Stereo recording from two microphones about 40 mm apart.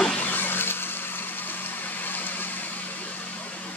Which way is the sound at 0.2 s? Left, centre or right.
Left.